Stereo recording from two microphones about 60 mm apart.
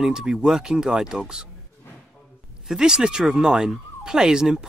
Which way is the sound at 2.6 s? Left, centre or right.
Centre.